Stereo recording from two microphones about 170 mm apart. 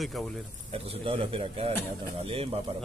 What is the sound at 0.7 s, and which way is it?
Speech, 35° right (ahead or behind).